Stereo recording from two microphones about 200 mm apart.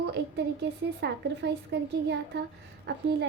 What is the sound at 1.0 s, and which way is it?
A woman's voice, 55° right (ahead or behind).